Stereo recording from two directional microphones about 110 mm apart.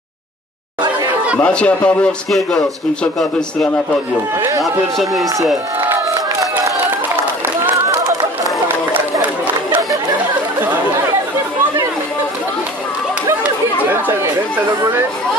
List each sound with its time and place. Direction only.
1.4 s a man's voice: 10° left (ahead or behind)
4.4 s speech: 30° right (ahead or behind)
4.9 s a man's voice: centre (ahead or behind)
7.7 s chatter: 30° right (ahead or behind)
13.8 s chatter: 20° right (ahead or behind)